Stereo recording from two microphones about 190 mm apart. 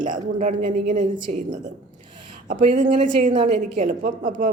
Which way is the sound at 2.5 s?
40° right (ahead or behind).